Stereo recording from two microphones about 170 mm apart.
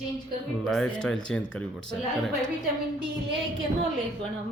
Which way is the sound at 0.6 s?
5° left (ahead or behind).